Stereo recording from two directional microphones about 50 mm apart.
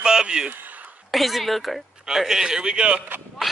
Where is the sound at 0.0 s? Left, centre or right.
Centre.